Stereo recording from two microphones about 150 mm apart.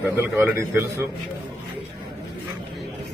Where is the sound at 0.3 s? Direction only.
15° right (ahead or behind).